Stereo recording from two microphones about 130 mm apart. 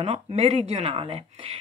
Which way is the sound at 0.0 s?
45° right (ahead or behind).